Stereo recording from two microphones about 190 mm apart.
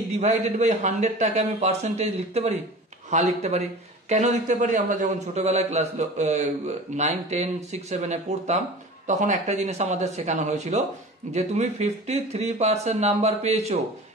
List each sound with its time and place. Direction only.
0.2 s speech: 40° right (ahead or behind)